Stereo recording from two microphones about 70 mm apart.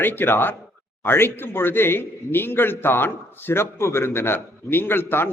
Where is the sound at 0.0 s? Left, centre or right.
Left.